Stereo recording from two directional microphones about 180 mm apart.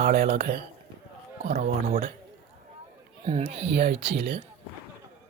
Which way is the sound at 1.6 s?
50° right (ahead or behind).